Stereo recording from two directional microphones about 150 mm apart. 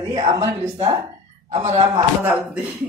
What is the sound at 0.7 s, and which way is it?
Speech, 30° right (ahead or behind).